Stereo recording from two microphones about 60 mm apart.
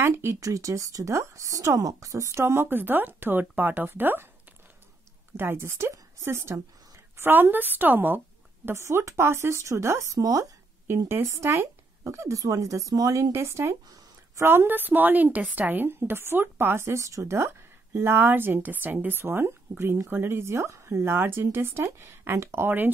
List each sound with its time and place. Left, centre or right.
0.1 s speech: right
0.4 s speech: right
2.4 s a woman's voice: right
5.4 s a woman's voice: right
8.7 s speech: right
10.1 s a woman's voice: right
10.9 s a woman's voice: right
12.4 s speech: right
14.4 s a woman's voice: right
17.0 s speech: right
17.9 s a woman's voice: right